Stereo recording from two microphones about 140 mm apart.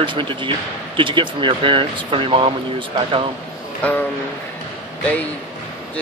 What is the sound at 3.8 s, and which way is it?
Speech, 15° left (ahead or behind).